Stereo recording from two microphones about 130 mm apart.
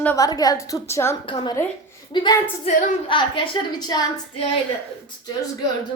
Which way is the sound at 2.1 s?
35° left (ahead or behind).